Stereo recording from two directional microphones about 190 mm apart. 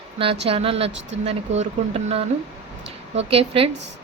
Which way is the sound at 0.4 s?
30° right (ahead or behind).